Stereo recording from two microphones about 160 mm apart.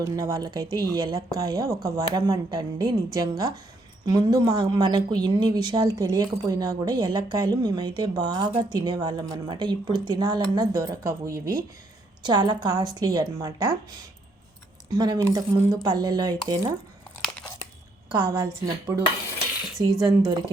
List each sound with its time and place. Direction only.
0.0 s speech: 20° right (ahead or behind)
14.8 s speech: 25° right (ahead or behind)
18.6 s speech: 20° right (ahead or behind)